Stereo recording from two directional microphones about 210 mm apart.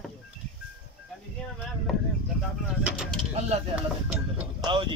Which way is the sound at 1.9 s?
Centre (ahead or behind).